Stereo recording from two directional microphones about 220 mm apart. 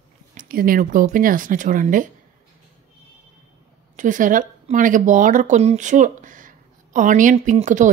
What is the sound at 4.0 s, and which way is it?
Speech, 35° right (ahead or behind).